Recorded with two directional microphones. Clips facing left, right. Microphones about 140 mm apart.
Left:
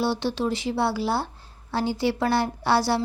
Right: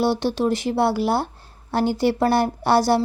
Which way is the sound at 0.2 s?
50° right (ahead or behind).